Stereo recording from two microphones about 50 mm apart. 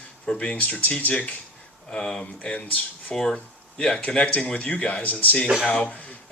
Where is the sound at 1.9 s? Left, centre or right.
Centre.